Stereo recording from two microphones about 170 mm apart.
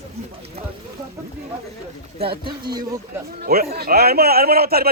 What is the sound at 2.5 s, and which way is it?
Speech, 25° right (ahead or behind).